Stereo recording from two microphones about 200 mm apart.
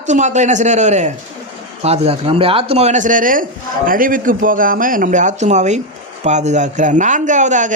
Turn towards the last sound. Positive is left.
turn(degrees=-40)  # may be behind; listen again after turning